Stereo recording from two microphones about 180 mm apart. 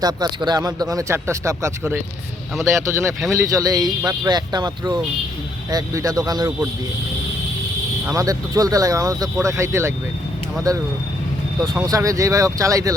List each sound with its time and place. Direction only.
0.0 s speech: 20° right (ahead or behind)
8.0 s speech: 20° right (ahead or behind)
11.9 s speech: 20° right (ahead or behind)